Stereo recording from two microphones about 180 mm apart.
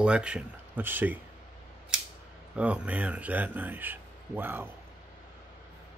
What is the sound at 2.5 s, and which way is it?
Speech, 5° right (ahead or behind).